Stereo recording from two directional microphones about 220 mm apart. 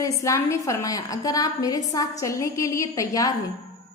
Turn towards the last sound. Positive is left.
turn(degrees=15)  # may be behind; listen again after turning